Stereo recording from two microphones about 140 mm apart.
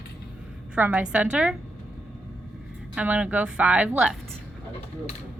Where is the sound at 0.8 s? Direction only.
10° right (ahead or behind).